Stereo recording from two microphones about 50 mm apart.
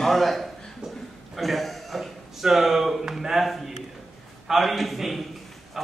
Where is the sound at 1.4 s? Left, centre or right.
Centre.